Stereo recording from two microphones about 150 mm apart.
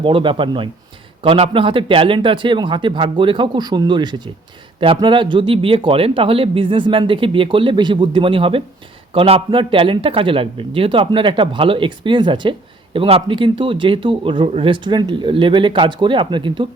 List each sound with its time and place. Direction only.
0.0 s speech: 35° right (ahead or behind)